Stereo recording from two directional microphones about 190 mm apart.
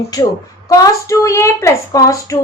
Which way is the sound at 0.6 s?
15° left (ahead or behind).